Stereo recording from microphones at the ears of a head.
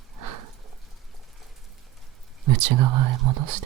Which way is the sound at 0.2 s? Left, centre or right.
Right.